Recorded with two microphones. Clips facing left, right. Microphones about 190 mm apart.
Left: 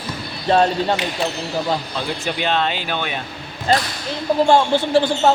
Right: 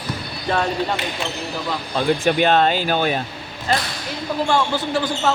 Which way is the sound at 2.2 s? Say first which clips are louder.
Right 4 dB; 50° right (ahead or behind).